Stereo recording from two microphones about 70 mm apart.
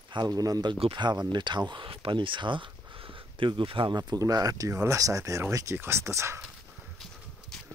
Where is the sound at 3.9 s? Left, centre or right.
Right.